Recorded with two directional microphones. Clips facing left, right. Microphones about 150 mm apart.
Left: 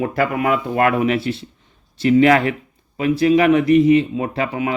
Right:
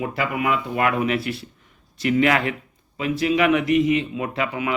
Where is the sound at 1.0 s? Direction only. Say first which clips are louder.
Left 4 dB; 30° left (ahead or behind).